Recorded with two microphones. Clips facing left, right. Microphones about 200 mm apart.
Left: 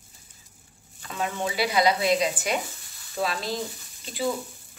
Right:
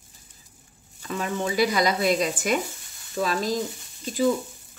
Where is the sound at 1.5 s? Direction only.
45° right (ahead or behind).